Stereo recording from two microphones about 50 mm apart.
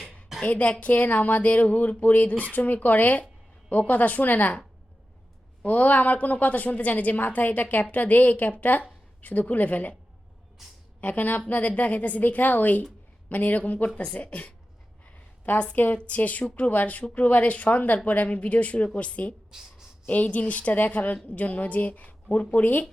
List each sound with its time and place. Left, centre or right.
0.0 s a sound: centre
0.4 s a woman's voice: left
5.6 s a woman's voice: left
11.0 s a woman's voice: left
15.0 s a sound: left
15.7 s a woman's voice: left
19.5 s speech: centre
20.1 s a woman's voice: left